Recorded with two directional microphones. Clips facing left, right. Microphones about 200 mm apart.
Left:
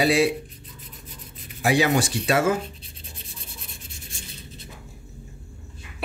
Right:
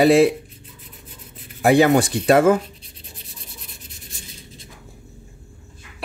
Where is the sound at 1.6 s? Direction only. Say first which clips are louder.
Right 6 dB; 55° right (ahead or behind).